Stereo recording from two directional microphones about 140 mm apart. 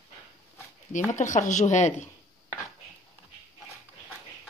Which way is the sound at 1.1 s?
60° left (ahead or behind).